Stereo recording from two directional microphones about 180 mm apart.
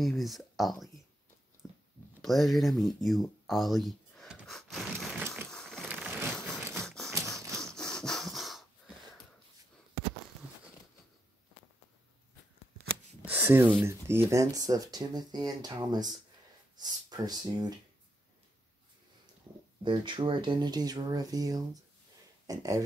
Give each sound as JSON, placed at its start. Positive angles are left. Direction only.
{"t": 0.0, "sound": "speech", "side_deg": 0}
{"t": 1.6, "sound": "a sound", "side_deg": 0}
{"t": 5.9, "sound": "a sound", "side_deg": -10}
{"t": 6.2, "sound": "crushing", "side_deg": 0}
{"t": 6.8, "sound": "tap", "side_deg": 0}
{"t": 7.6, "sound": "wood", "side_deg": 5}
{"t": 13.2, "sound": "speech", "side_deg": -10}
{"t": 16.7, "sound": "a sound", "side_deg": -20}
{"t": 19.8, "sound": "speech", "side_deg": -25}